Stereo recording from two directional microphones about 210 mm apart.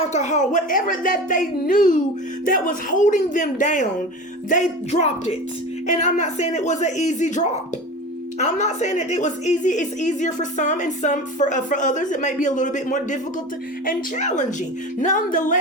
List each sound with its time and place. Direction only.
0.1 s a woman's voice: 35° left (ahead or behind)